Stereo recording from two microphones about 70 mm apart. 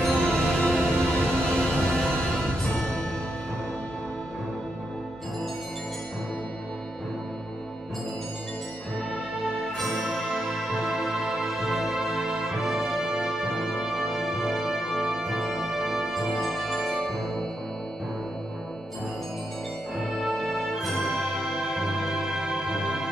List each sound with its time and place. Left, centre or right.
0.0 s music: centre
0.8 s music: right
1.6 s music: centre
9.8 s music: centre
20.0 s music: centre